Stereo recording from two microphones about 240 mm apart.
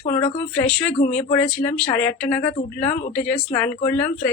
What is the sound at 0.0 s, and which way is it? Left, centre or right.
Speech, left.